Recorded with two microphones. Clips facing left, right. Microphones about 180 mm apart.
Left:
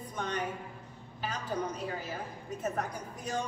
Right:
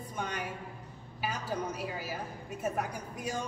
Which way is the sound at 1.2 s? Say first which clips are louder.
Even; 10° right (ahead or behind).